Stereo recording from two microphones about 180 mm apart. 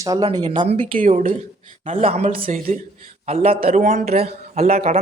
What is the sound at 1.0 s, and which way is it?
Speech, 45° right (ahead or behind).